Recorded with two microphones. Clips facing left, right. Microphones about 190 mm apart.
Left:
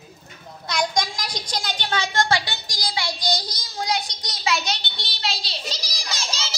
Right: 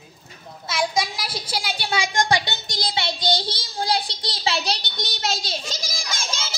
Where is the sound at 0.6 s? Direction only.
5° right (ahead or behind).